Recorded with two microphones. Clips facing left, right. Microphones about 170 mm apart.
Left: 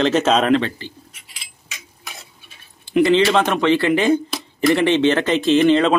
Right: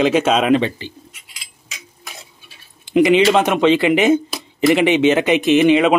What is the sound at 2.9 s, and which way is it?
Speech, 15° right (ahead or behind).